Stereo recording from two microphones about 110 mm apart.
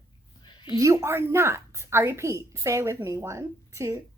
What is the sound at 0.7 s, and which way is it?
A woman's voice, 30° right (ahead or behind).